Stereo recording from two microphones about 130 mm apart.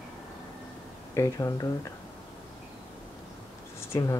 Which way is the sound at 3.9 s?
25° left (ahead or behind).